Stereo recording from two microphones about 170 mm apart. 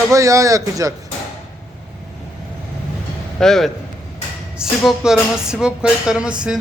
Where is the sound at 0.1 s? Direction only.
20° right (ahead or behind).